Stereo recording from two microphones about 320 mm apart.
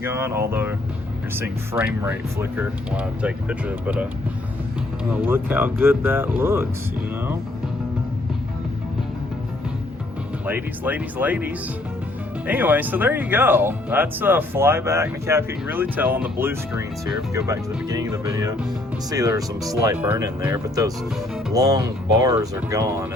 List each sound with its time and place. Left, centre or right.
0.0 s speech: centre
5.1 s speech: centre
10.4 s speech: centre